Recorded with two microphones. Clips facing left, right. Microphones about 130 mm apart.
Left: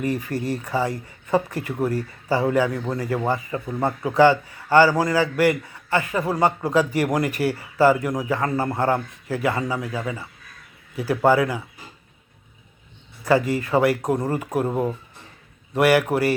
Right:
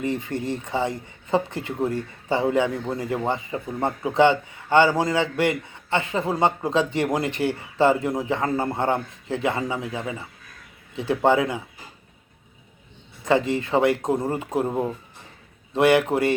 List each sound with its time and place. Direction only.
0.0 s a man's voice: 25° right (ahead or behind)
13.2 s a man's voice: 25° right (ahead or behind)
14.7 s speech: 5° left (ahead or behind)
15.7 s a man's voice: 25° right (ahead or behind)